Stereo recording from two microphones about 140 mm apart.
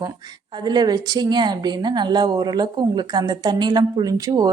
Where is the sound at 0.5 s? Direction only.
30° right (ahead or behind).